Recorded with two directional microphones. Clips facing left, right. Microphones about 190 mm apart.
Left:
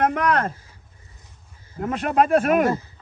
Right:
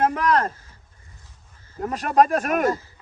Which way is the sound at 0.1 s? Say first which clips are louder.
Even; 35° right (ahead or behind).